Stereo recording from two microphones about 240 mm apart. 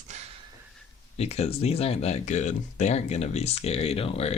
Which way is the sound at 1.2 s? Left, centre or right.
Left.